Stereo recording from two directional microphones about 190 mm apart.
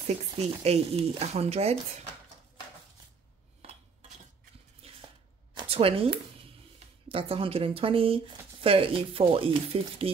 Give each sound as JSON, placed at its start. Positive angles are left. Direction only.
{"t": 0.0, "sound": "speech", "side_deg": -35}
{"t": 4.8, "sound": "squish", "side_deg": -30}
{"t": 5.6, "sound": "speech", "side_deg": -30}